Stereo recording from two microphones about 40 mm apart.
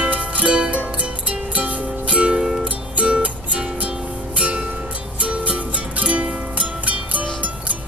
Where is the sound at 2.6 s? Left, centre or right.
Right.